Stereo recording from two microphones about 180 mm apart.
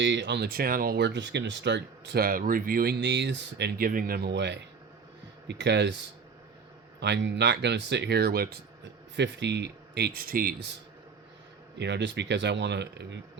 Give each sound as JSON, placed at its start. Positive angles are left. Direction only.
{"t": 0.0, "sound": "speech", "side_deg": -80}
{"t": 7.0, "sound": "speech", "side_deg": -75}
{"t": 9.1, "sound": "speech", "side_deg": -75}
{"t": 11.8, "sound": "speech", "side_deg": -75}